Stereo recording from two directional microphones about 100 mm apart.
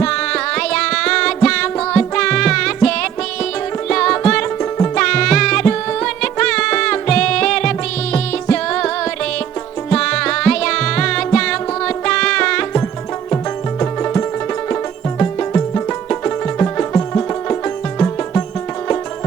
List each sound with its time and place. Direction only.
0.0 s music: 10° left (ahead or behind)
9.9 s music: 10° left (ahead or behind)
15.2 s music: 20° left (ahead or behind)